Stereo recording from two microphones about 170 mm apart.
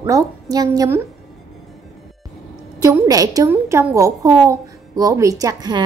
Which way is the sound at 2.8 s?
20° right (ahead or behind).